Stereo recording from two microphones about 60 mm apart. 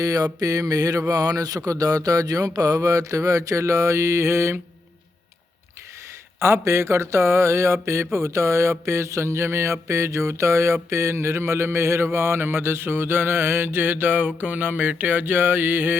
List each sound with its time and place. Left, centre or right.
0.0 s mantra: right
0.3 s speech: right
6.4 s mantra: right